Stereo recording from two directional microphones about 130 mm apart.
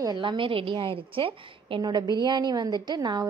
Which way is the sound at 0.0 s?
35° right (ahead or behind).